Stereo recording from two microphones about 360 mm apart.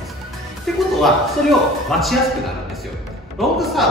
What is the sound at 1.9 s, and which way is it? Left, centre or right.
Speech, centre.